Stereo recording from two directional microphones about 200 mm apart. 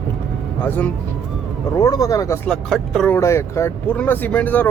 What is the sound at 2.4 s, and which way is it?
Speech, centre (ahead or behind).